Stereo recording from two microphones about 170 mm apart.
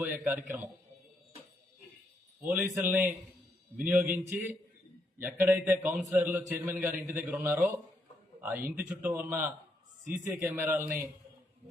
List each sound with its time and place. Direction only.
0.0 s a man's voice: 10° right (ahead or behind)
2.5 s a man's voice: centre (ahead or behind)